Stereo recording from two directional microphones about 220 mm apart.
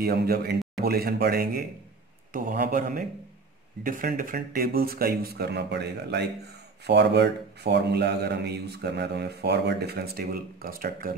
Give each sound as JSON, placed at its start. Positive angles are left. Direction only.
{"t": 0.0, "sound": "a man's voice", "side_deg": -45}